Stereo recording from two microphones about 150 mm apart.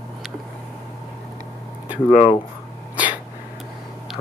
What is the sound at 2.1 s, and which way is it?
Speech, 40° left (ahead or behind).